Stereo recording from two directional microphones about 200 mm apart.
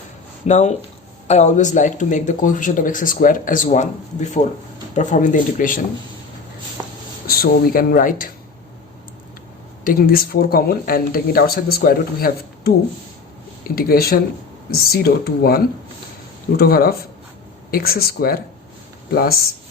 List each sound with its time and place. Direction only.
0.4 s speech: 35° left (ahead or behind)
7.3 s speech: 45° left (ahead or behind)
9.8 s speech: 45° left (ahead or behind)